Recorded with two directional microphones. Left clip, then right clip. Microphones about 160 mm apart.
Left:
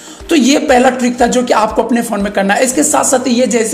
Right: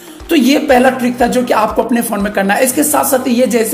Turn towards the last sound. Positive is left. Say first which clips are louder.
# even
turn(degrees=0)  # may be behind; listen again after turning